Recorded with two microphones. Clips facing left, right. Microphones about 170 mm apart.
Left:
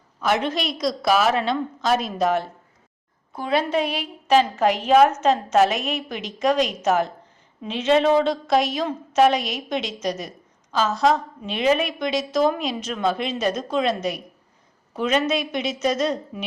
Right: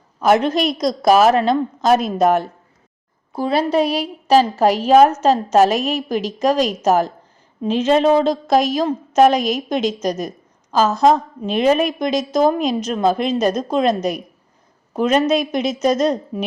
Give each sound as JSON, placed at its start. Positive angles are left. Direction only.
{"t": 0.2, "sound": "a woman's voice", "side_deg": -45}
{"t": 3.3, "sound": "a woman's voice", "side_deg": -35}